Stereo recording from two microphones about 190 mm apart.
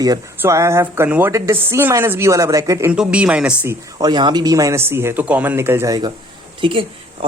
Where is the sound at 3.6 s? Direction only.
20° right (ahead or behind).